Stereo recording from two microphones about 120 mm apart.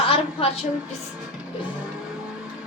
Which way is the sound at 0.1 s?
55° left (ahead or behind).